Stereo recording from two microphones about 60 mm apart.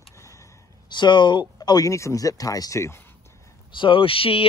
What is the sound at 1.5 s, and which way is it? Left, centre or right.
Speech, left.